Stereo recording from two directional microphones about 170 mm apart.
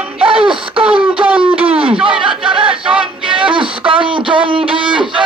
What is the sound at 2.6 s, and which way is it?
Music, 30° right (ahead or behind).